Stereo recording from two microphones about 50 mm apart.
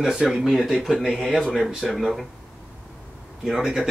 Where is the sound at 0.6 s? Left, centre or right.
Centre.